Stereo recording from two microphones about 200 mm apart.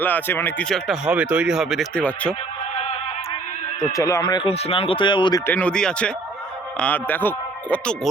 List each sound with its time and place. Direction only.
0.0 s speech: 10° left (ahead or behind)
3.9 s speech: 15° left (ahead or behind)
5.5 s speech: 5° left (ahead or behind)